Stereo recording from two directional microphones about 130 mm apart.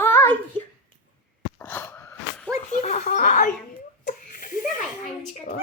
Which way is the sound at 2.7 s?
60° left (ahead or behind).